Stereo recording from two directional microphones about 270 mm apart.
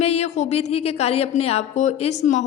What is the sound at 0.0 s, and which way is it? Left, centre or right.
Speech, left.